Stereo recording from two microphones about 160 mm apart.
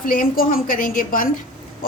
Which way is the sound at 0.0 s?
60° left (ahead or behind).